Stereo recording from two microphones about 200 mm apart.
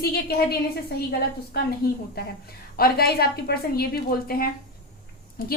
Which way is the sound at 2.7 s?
50° left (ahead or behind).